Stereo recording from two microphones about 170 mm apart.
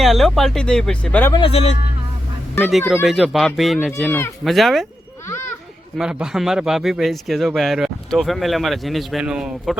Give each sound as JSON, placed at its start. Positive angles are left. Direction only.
{"t": 0.0, "sound": "speech", "side_deg": 0}
{"t": 1.3, "sound": "speech", "side_deg": 30}
{"t": 2.6, "sound": "speech", "side_deg": 0}
{"t": 6.0, "sound": "speech", "side_deg": -5}